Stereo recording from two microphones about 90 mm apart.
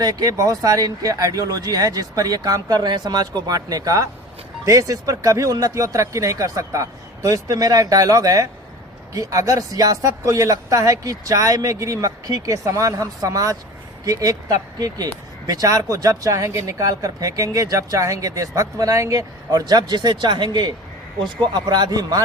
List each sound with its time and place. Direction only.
0.0 s speech: 45° right (ahead or behind)